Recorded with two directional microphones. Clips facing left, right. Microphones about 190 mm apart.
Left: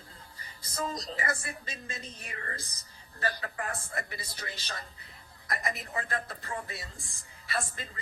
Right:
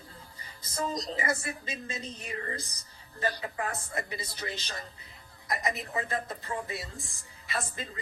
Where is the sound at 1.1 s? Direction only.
20° right (ahead or behind).